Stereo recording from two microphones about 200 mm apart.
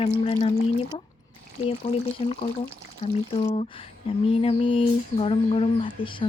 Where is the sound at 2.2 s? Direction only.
30° left (ahead or behind).